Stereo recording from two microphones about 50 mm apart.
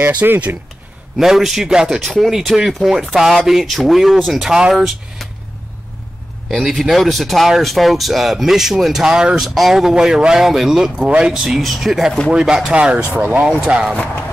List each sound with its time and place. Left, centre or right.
0.0 s speech: right
1.1 s speech: centre
2.0 s speech: centre
6.5 s speech: centre
9.4 s speech: centre
12.3 s speech: centre